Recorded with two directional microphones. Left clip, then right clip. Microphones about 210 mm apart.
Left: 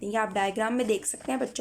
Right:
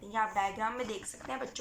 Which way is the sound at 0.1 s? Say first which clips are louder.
Left 4 dB; 40° left (ahead or behind).